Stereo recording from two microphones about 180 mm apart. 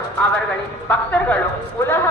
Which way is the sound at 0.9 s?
5° left (ahead or behind).